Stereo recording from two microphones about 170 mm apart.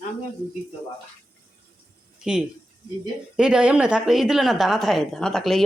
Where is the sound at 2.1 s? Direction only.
5° right (ahead or behind).